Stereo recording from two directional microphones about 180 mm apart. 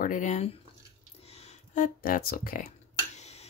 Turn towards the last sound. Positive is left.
turn(degrees=40)  # may be behind; listen again after turning